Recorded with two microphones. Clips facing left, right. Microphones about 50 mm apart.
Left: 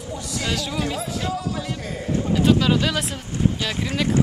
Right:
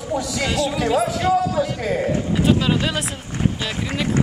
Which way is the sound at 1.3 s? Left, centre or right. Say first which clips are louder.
Right 8 dB; right.